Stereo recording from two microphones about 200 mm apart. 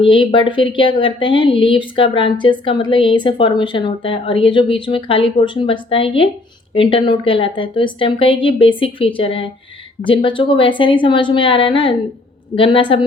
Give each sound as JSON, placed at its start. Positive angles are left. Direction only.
{"t": 0.0, "sound": "speech", "side_deg": 25}